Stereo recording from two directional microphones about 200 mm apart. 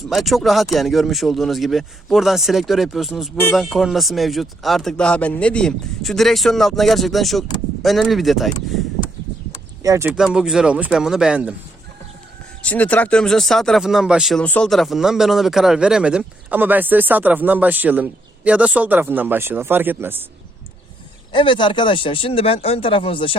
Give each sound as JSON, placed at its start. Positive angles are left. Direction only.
{"t": 0.1, "sound": "speech", "side_deg": 0}
{"t": 9.8, "sound": "speech", "side_deg": -15}
{"t": 10.2, "sound": "speech", "side_deg": 0}
{"t": 12.6, "sound": "speech", "side_deg": 5}
{"t": 21.3, "sound": "speech", "side_deg": 25}